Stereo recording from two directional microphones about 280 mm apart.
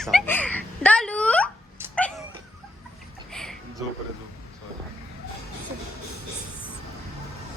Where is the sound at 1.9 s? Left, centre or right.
Centre.